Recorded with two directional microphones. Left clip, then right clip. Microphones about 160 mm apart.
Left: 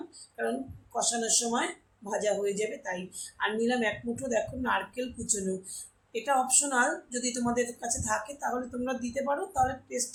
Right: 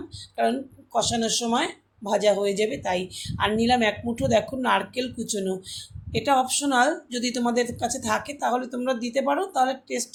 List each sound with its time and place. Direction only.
0.4 s speech: 50° right (ahead or behind)